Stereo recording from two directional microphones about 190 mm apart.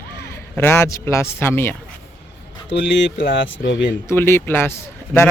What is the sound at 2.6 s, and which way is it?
Speech, 70° left (ahead or behind).